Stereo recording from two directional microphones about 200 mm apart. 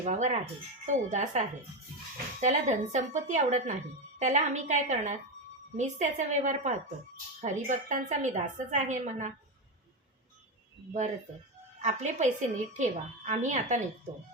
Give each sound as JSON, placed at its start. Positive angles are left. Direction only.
{"t": 0.0, "sound": "a woman's voice", "side_deg": -35}
{"t": 11.8, "sound": "a woman's voice", "side_deg": -35}